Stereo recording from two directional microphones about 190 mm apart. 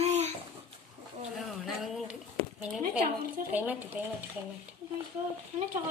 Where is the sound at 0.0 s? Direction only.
35° right (ahead or behind).